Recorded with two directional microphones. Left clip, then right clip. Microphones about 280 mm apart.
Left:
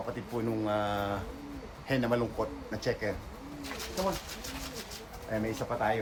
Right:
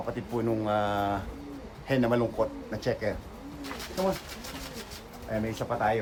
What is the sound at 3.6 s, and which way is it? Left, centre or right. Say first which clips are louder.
Pigeon: right 2 dB; centre.